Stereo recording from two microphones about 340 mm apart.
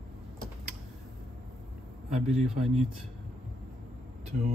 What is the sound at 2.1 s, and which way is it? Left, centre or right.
Speech, centre.